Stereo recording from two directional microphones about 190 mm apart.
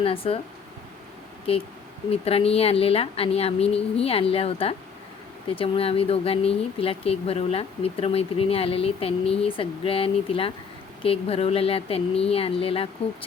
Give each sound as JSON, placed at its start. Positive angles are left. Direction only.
{"t": 0.0, "sound": "speech", "side_deg": 30}
{"t": 2.0, "sound": "speech", "side_deg": 30}